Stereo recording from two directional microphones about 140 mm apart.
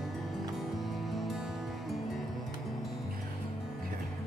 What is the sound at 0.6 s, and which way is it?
Music, centre (ahead or behind).